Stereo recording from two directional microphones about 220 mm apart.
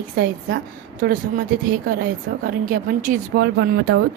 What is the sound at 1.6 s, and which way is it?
A woman's voice, 40° right (ahead or behind).